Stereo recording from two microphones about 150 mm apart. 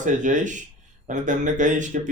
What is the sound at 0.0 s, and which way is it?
Speech, 55° right (ahead or behind).